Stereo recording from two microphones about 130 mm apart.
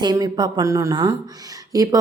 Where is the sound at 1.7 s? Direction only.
30° right (ahead or behind).